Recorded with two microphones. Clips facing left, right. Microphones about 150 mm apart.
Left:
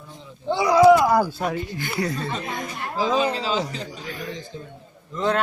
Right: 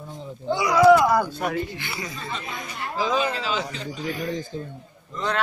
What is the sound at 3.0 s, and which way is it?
Speech, 30° left (ahead or behind).